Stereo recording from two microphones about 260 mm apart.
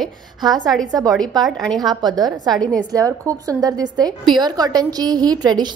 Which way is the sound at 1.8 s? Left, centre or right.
Centre.